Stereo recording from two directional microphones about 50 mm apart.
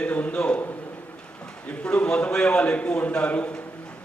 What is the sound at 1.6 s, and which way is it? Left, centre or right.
A man's voice, left.